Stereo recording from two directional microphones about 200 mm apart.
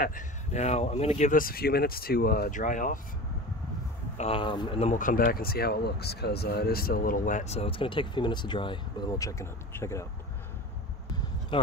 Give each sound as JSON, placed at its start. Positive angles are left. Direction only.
{"t": 0.0, "sound": "speech", "side_deg": 40}
{"t": 4.2, "sound": "speech", "side_deg": 25}
{"t": 11.5, "sound": "speech", "side_deg": 25}